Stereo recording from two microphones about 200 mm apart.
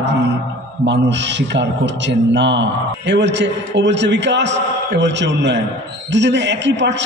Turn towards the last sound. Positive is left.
turn(degrees=-60)  # may be behind; listen again after turning